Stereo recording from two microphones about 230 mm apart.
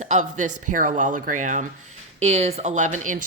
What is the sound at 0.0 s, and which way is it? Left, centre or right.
A woman's voice, right.